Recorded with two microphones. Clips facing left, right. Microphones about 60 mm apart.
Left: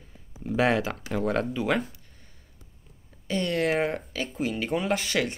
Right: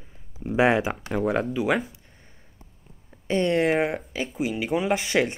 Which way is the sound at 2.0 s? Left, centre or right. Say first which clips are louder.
Right 3 dB; right.